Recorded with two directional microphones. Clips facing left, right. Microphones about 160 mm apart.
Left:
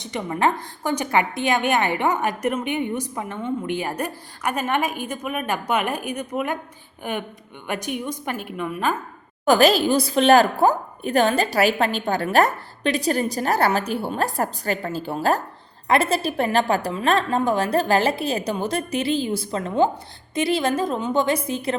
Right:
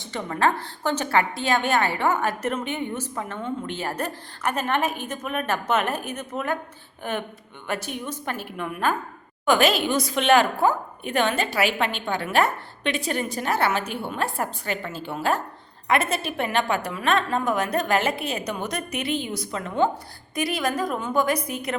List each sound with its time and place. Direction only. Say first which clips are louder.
0.0 s a woman's voice: left 2 dB; 15° left (ahead or behind)
9.5 s a woman's voice: left 4 dB; 35° left (ahead or behind)